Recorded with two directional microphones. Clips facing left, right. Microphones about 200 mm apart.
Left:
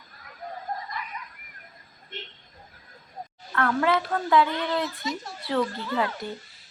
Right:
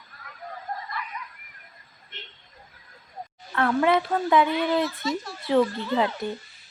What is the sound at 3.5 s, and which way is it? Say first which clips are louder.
Speech: right 2 dB; 20° right (ahead or behind).